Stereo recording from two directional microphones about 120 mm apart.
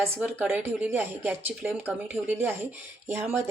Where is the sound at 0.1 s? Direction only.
15° right (ahead or behind).